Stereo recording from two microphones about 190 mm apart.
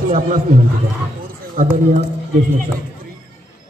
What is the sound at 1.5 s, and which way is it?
Speech, 45° right (ahead or behind).